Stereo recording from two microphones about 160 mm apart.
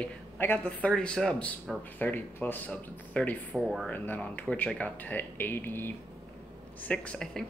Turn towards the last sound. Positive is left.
turn(degrees=5)  # may be behind; listen again after turning